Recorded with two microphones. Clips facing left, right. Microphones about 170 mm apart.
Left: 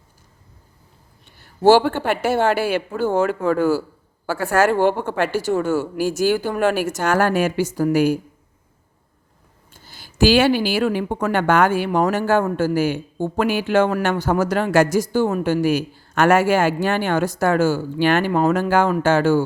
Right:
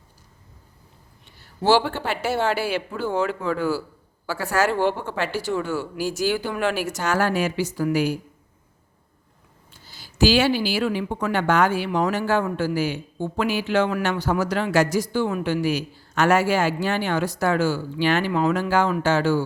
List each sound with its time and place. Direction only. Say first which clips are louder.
1.4 s speech: left 6 dB; 50° left (ahead or behind)
9.7 s speech: left 4 dB; 50° left (ahead or behind)